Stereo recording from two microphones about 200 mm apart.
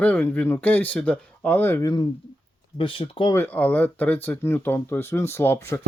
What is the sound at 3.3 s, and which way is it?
Speech, 10° left (ahead or behind).